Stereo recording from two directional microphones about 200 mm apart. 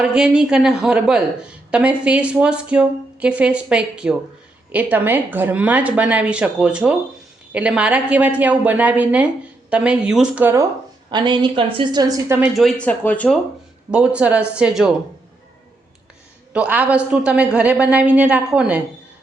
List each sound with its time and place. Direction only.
0.0 s a woman's voice: 5° right (ahead or behind)
11.1 s a woman's voice: 25° right (ahead or behind)
12.4 s speech: centre (ahead or behind)
13.9 s speech: 5° right (ahead or behind)
16.5 s a woman's voice: 5° right (ahead or behind)